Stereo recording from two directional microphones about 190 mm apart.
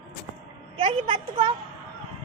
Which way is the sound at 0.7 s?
30° right (ahead or behind).